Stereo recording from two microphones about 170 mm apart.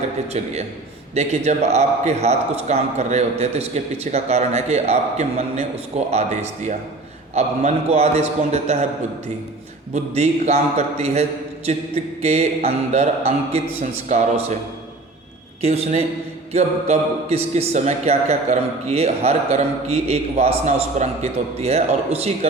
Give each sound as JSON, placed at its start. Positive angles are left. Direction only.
{"t": 0.4, "sound": "speech", "side_deg": -40}
{"t": 9.9, "sound": "speech", "side_deg": -40}
{"t": 15.6, "sound": "speech", "side_deg": -35}